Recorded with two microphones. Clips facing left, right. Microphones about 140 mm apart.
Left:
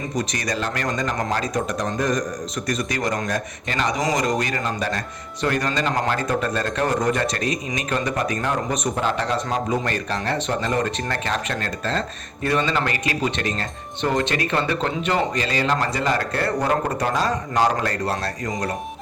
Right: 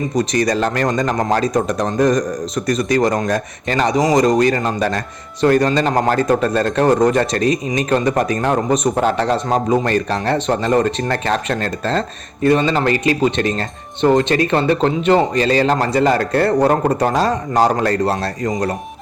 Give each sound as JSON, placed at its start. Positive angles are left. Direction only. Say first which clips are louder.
{"t": 0.2, "sound": "speech", "louder": "right 9 dB", "side_deg": -35}
{"t": 9.3, "sound": "speech", "louder": "right 7 dB", "side_deg": -40}